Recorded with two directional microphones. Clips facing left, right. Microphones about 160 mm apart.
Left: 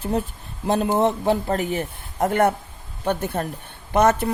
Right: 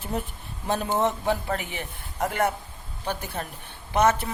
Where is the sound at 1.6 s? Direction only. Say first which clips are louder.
Left 10 dB; 45° left (ahead or behind).